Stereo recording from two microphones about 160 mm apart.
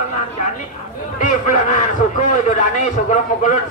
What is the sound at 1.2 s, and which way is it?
A man's voice, 50° left (ahead or behind).